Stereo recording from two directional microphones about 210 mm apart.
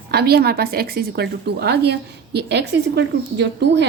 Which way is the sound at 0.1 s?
50° right (ahead or behind).